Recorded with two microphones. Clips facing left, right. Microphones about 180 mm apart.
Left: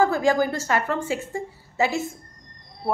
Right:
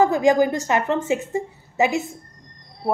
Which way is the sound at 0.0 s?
20° right (ahead or behind).